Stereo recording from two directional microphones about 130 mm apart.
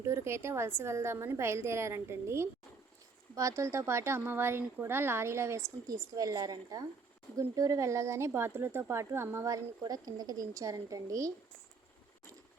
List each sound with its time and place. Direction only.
0.0 s speech: 20° right (ahead or behind)